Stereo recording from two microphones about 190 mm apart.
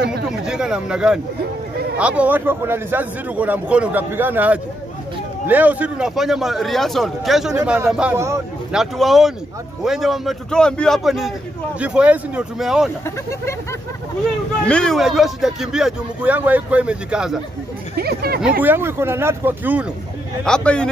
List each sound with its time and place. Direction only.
0.3 s a man's voice: 5° right (ahead or behind)
8.7 s speech: centre (ahead or behind)
13.0 s speech: 15° left (ahead or behind)
14.7 s speech: 5° left (ahead or behind)
17.9 s speech: 55° right (ahead or behind)
18.6 s a man's voice: 10° right (ahead or behind)
20.4 s speech: 5° left (ahead or behind)